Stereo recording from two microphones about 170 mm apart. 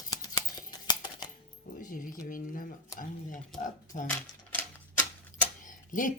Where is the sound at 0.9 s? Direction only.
25° left (ahead or behind).